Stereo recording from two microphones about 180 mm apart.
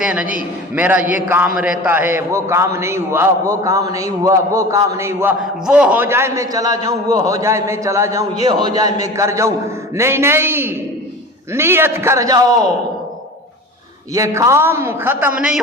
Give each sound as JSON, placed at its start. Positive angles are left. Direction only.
{"t": 0.0, "sound": "a man's voice", "side_deg": -5}
{"t": 14.1, "sound": "a man's voice", "side_deg": -15}